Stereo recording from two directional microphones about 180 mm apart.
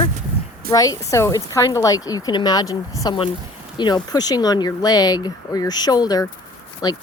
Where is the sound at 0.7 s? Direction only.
20° left (ahead or behind).